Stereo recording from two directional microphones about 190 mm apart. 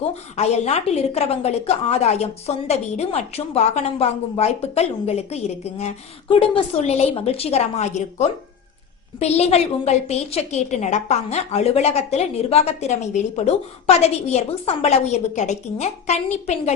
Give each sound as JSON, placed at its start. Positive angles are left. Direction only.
{"t": 0.3, "sound": "a woman's voice", "side_deg": 35}